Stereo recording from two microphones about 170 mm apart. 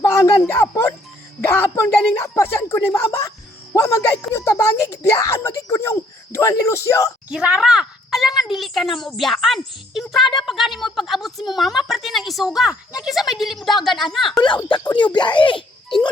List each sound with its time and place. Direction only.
0.0 s a sound: 20° left (ahead or behind)
1.4 s speech: 15° left (ahead or behind)
7.3 s a woman's voice: 5° right (ahead or behind)
14.4 s speech: 25° left (ahead or behind)